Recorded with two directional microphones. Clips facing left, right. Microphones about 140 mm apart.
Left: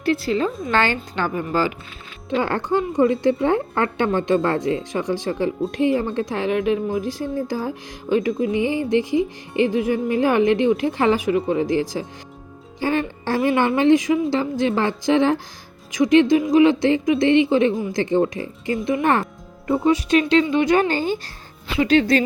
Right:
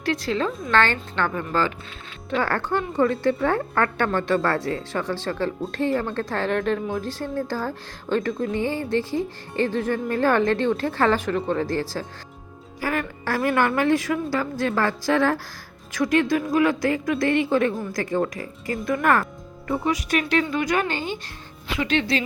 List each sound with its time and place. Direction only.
0.0 s a woman's voice: 5° left (ahead or behind)
0.7 s speech: 15° left (ahead or behind); by 22.2 s 40° left (ahead or behind)